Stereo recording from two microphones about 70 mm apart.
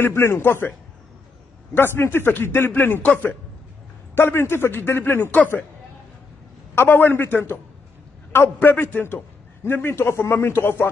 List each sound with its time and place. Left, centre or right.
0.0 s a man's voice: left
3.0 s a man's voice: centre
4.1 s a man's voice: left
6.7 s a man's voice: left